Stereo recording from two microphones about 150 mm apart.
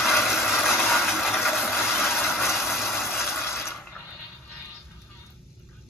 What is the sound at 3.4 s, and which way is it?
Water, 15° left (ahead or behind).